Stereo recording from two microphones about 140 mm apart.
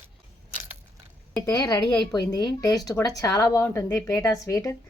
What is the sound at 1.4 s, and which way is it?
Speech, 30° left (ahead or behind).